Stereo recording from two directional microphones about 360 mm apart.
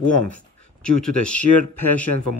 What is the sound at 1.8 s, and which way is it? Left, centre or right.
Speech, left.